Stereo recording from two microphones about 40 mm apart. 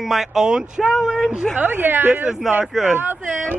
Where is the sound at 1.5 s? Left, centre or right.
Right.